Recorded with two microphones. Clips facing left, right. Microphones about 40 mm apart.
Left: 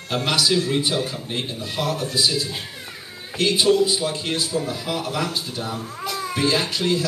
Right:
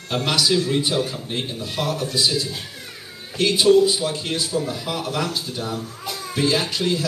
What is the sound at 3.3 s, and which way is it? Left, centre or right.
Speech, left.